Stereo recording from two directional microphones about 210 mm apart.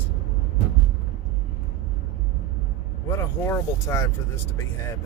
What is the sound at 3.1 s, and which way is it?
Speech, 15° left (ahead or behind).